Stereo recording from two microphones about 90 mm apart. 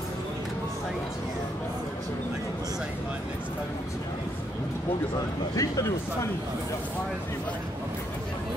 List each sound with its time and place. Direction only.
5.6 s speech: 35° left (ahead or behind)